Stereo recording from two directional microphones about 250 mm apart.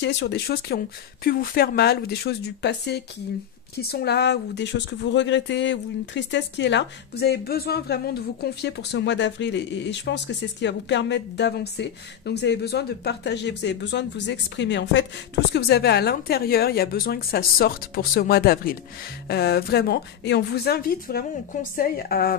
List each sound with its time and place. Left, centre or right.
0.0 s a woman's voice: left